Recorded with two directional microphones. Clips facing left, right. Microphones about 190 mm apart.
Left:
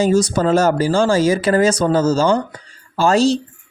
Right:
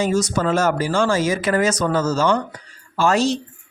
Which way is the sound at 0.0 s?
35° left (ahead or behind).